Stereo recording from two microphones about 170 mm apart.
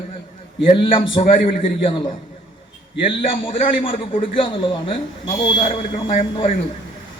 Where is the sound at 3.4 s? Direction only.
30° left (ahead or behind).